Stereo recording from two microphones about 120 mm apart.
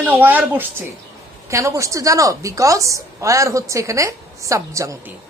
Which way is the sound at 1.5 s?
25° right (ahead or behind).